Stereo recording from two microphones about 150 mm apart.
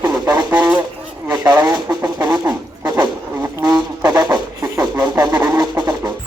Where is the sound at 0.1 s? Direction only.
30° right (ahead or behind).